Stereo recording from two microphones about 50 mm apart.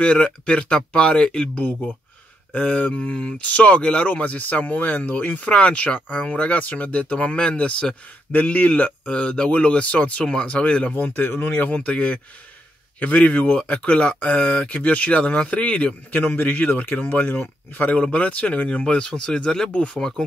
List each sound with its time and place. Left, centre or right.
0.0 s speech: left
10.9 s speech: left
20.0 s speech: centre